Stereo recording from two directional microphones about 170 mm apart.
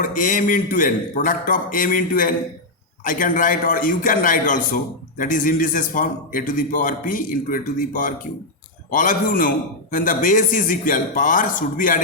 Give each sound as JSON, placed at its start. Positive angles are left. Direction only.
{"t": 0.0, "sound": "a man's voice", "side_deg": 50}